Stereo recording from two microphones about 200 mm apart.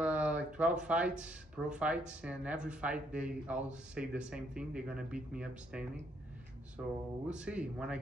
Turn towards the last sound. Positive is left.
turn(degrees=-5)  # may be behind; listen again after turning